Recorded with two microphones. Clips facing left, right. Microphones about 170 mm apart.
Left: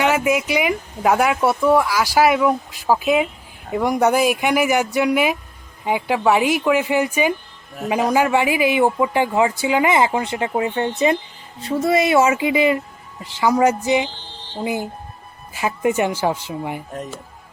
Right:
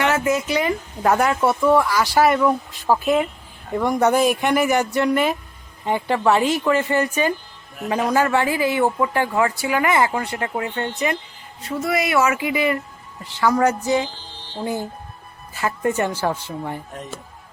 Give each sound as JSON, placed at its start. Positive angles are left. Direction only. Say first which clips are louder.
{"t": 0.0, "sound": "speech", "louder": "left 2 dB", "side_deg": 15}